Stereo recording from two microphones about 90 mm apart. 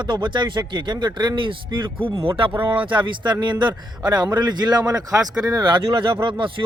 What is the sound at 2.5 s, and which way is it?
Speech, 20° right (ahead or behind).